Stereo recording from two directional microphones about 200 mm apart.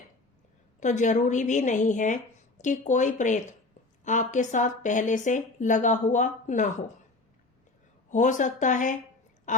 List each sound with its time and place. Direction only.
0.8 s speech: 35° left (ahead or behind)
8.1 s speech: 40° left (ahead or behind)